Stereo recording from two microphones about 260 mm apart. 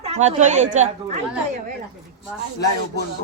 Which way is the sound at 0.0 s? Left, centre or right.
Right.